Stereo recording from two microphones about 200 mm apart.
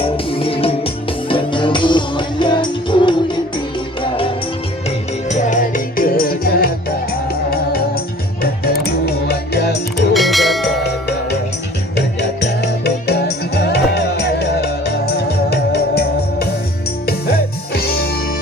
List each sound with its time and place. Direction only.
0.3 s music: 25° left (ahead or behind)
5.3 s music: 40° left (ahead or behind)
8.8 s music: 50° left (ahead or behind)
10.2 s bell: centre (ahead or behind)
12.6 s music: 55° left (ahead or behind)
17.7 s music: 50° left (ahead or behind)